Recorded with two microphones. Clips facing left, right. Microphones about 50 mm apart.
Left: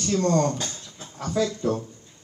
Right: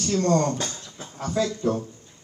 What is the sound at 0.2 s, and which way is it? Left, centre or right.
A man's voice, right.